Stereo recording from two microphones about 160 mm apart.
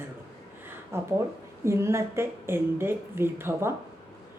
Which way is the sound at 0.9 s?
15° right (ahead or behind).